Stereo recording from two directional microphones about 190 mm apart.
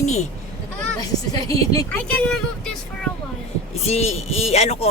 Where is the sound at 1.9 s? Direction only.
5° left (ahead or behind).